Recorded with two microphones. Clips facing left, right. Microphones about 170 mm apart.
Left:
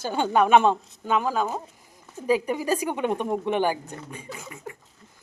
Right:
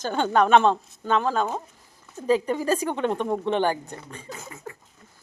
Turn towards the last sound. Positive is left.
turn(degrees=20)  # may be behind; listen again after turning